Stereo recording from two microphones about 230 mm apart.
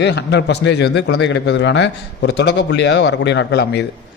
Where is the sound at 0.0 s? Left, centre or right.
Left.